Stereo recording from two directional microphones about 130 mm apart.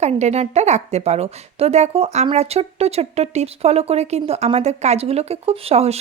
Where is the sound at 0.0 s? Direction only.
60° right (ahead or behind).